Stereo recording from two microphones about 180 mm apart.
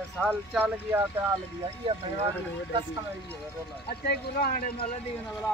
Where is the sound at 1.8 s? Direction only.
30° right (ahead or behind).